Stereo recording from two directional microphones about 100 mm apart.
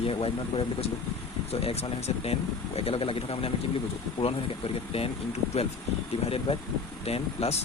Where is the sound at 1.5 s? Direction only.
85° left.